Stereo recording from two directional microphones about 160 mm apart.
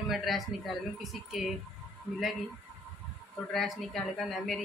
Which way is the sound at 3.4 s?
Centre (ahead or behind).